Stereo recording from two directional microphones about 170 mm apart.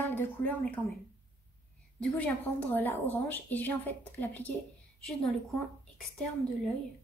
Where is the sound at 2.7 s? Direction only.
10° left (ahead or behind).